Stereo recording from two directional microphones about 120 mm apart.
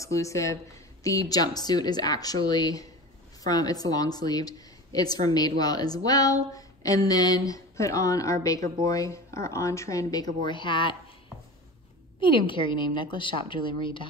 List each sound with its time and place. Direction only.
0.0 s a woman's voice: 25° left (ahead or behind)
10.4 s a woman's voice: 40° left (ahead or behind)
12.2 s a woman's voice: 45° left (ahead or behind)